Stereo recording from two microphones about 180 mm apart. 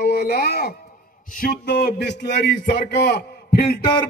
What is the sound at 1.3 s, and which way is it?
Speech, 55° left (ahead or behind).